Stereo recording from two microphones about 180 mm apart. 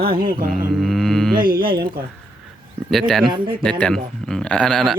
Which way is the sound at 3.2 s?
25° right (ahead or behind).